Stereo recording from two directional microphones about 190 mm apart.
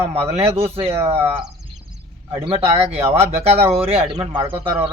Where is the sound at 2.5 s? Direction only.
30° right (ahead or behind).